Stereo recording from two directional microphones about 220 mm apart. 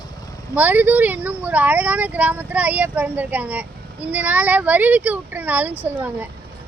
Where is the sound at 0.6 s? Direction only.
10° right (ahead or behind).